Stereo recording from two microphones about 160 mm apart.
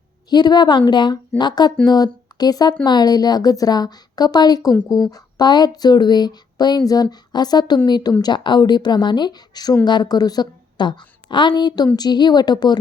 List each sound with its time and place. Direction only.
0.3 s a woman's voice: 25° left (ahead or behind)